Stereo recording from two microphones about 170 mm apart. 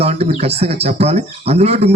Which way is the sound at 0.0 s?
40° right (ahead or behind).